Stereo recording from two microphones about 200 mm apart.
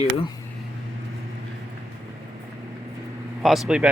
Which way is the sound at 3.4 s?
Centre (ahead or behind).